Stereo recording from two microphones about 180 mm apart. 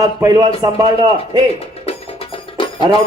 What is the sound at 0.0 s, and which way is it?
Speech, 20° right (ahead or behind).